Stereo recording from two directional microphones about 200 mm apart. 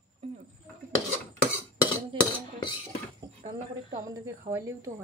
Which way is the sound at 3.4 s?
15° right (ahead or behind).